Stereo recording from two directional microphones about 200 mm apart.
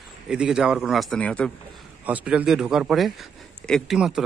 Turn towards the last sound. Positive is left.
turn(degrees=0)  # may be behind; listen again after turning